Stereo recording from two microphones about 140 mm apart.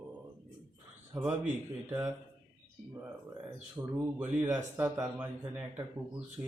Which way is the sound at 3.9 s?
15° right (ahead or behind).